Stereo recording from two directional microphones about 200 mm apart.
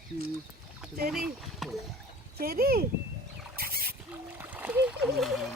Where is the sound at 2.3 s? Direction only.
50° right (ahead or behind).